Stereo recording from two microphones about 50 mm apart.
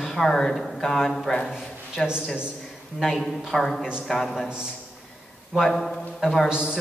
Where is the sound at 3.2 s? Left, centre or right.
Centre.